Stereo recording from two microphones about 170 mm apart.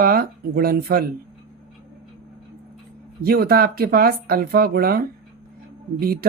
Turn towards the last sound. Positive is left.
turn(degrees=-60)  # may be behind; listen again after turning